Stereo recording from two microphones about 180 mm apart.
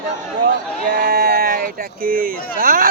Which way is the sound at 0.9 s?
55° right (ahead or behind).